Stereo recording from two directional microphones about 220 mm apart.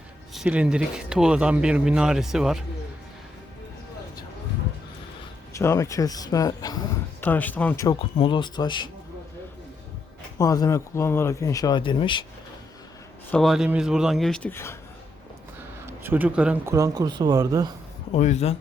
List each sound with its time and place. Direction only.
0.3 s speech: 5° right (ahead or behind)
5.5 s speech: 15° left (ahead or behind)
10.3 s speech: 15° left (ahead or behind)
13.3 s speech: centre (ahead or behind)
15.9 s speech: 10° right (ahead or behind)
18.1 s speech: 30° left (ahead or behind)